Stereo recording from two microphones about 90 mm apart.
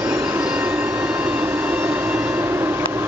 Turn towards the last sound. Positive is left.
turn(degrees=-25)  # may be behind; listen again after turning